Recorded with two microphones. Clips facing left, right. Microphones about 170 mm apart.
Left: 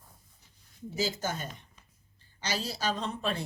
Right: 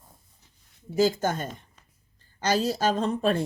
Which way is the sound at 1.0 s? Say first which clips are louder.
Right 9 dB; 50° right (ahead or behind).